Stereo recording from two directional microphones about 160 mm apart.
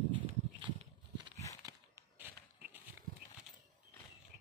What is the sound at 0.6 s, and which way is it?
Horse, 30° right (ahead or behind).